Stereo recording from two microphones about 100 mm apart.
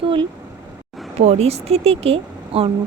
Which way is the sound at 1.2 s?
90° right.